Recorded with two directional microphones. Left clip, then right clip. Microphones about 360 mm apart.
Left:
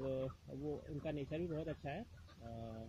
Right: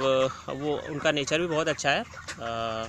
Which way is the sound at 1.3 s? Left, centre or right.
Right.